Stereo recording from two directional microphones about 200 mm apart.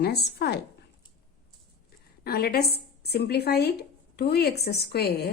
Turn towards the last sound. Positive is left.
turn(degrees=55)  # may be behind; listen again after turning